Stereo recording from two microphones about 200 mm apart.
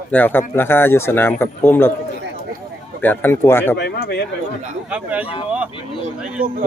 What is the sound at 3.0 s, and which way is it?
Speech, 10° left (ahead or behind).